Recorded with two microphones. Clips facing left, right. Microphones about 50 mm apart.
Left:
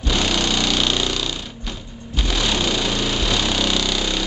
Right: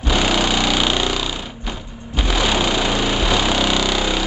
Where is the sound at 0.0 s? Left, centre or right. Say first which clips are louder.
Right 3 dB; centre.